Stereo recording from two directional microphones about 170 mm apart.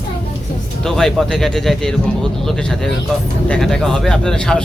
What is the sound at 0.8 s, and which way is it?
Speech, centre (ahead or behind).